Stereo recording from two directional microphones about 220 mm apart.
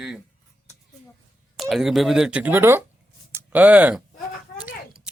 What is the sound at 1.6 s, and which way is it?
Speech, centre (ahead or behind).